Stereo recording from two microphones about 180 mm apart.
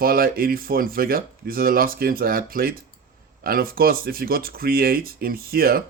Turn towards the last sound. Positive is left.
turn(degrees=-55)  # may be behind; listen again after turning